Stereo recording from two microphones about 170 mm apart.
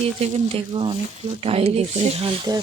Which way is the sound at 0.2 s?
35° right (ahead or behind).